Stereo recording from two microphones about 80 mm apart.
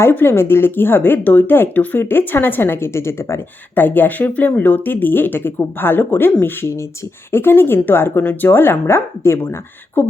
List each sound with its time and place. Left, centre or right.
0.0 s speech: left
3.8 s speech: left